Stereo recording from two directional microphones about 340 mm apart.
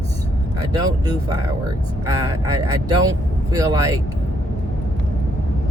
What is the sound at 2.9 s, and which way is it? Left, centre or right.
Speech, centre.